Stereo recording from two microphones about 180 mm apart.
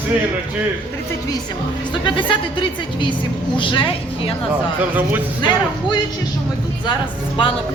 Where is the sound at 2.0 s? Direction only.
25° left (ahead or behind).